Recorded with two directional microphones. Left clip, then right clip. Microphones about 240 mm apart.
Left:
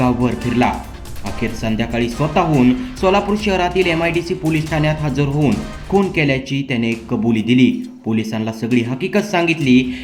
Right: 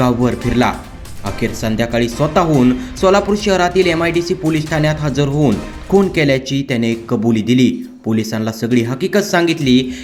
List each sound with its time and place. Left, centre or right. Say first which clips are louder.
0.0 s speech: right 2 dB; centre